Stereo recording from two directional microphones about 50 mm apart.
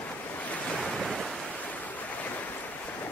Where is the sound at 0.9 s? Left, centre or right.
Centre.